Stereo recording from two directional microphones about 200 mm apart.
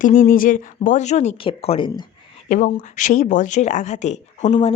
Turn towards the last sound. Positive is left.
turn(degrees=30)  # may be behind; listen again after turning